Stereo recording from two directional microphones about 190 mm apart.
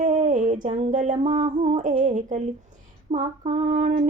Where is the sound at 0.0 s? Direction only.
40° right (ahead or behind).